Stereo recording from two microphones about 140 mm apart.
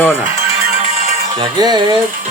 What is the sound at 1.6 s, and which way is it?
Speech, 30° right (ahead or behind).